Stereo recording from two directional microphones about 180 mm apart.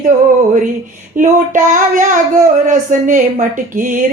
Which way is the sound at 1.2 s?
45° right (ahead or behind).